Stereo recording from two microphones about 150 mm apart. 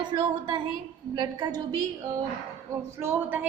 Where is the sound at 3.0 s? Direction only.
15° right (ahead or behind).